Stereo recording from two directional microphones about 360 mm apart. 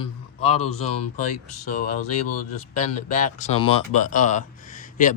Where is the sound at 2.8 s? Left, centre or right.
Centre.